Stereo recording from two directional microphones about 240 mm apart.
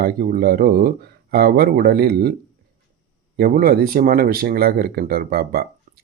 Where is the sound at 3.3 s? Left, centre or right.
Right.